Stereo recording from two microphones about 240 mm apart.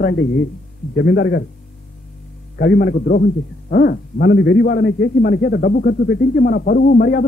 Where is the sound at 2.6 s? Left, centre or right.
Left.